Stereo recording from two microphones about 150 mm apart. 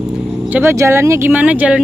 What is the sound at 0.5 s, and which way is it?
Speech, 15° right (ahead or behind).